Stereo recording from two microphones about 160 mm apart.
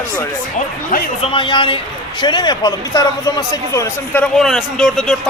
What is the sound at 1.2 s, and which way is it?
A man's voice, 30° left (ahead or behind).